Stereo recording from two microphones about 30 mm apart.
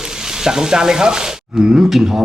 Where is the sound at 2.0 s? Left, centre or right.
Centre.